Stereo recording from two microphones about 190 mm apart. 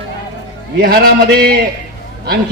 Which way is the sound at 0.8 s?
55° right (ahead or behind).